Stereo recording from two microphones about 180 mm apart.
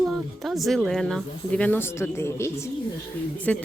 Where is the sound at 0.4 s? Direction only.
Centre (ahead or behind).